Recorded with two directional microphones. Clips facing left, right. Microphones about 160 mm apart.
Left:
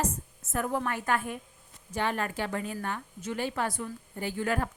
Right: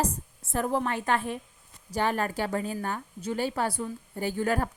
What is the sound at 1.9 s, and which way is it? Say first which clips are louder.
A woman's voice: right 3 dB; 40° right (ahead or behind).